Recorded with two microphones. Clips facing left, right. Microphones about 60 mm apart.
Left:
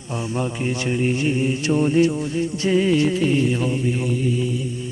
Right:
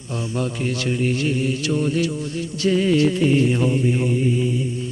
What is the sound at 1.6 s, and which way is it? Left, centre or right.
Mantra, left.